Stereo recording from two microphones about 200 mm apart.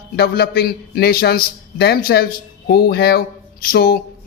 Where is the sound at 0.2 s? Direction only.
50° left (ahead or behind).